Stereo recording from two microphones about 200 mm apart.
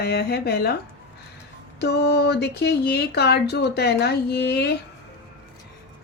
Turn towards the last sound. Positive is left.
turn(degrees=55)  # may be behind; listen again after turning